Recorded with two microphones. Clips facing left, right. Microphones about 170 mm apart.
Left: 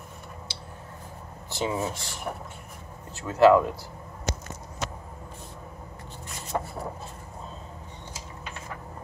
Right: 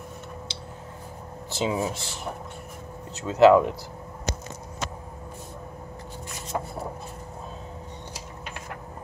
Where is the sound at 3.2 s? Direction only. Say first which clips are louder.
Right 2 dB; 20° right (ahead or behind).